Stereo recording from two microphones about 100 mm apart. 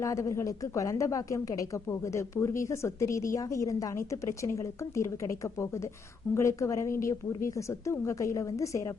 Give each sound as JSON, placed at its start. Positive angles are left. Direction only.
{"t": 0.0, "sound": "a woman's voice", "side_deg": 30}